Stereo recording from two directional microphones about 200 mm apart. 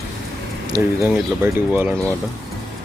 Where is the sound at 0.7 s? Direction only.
20° right (ahead or behind).